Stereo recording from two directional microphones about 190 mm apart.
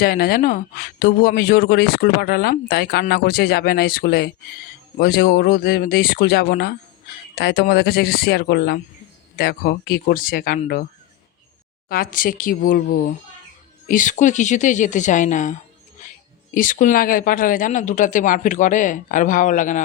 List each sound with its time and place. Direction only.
0.0 s a man's voice: 50° left (ahead or behind)
11.9 s a man's voice: 50° left (ahead or behind)
16.6 s a man's voice: 45° left (ahead or behind)